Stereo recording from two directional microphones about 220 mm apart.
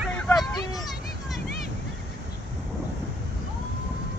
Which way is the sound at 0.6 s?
15° left (ahead or behind).